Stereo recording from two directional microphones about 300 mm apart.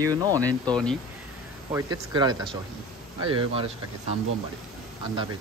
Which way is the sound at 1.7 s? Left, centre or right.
Centre.